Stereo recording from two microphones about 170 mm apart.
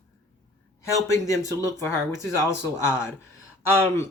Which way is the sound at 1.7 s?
15° left (ahead or behind).